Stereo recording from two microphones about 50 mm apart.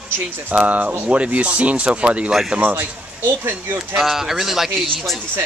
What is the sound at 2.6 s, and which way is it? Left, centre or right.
Speech, right.